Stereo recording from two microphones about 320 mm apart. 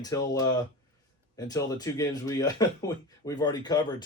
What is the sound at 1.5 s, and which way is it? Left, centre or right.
Speech, centre.